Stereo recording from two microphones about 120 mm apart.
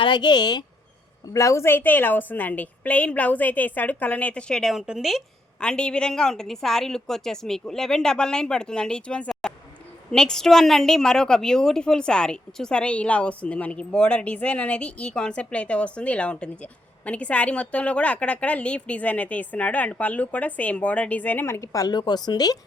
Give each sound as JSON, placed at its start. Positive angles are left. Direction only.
{"t": 0.0, "sound": "speech", "side_deg": 40}
{"t": 1.3, "sound": "a woman's voice", "side_deg": 25}